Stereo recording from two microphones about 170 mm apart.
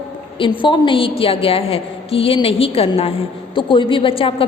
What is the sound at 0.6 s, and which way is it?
A woman's voice, 30° left (ahead or behind).